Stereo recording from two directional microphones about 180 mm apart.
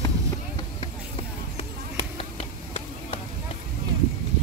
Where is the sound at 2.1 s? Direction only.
35° left (ahead or behind).